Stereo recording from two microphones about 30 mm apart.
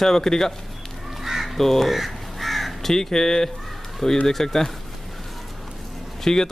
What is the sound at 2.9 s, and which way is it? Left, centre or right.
A man's voice, centre.